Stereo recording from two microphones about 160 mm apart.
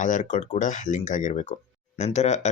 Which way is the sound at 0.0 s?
50° left (ahead or behind).